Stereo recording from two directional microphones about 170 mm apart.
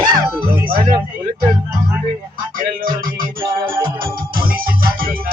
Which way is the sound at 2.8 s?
55° right (ahead or behind).